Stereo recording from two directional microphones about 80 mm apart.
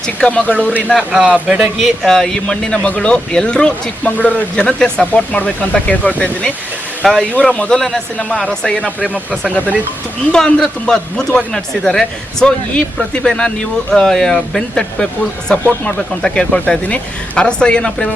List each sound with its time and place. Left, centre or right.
0.2 s speech: centre
0.9 s speech: centre
1.3 s speech: centre
2.0 s speech: centre
7.0 s speech: centre
10.3 s speech: centre
15.4 s speech: centre